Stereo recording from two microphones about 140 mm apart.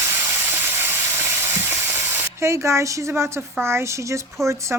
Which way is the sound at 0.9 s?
15° right (ahead or behind).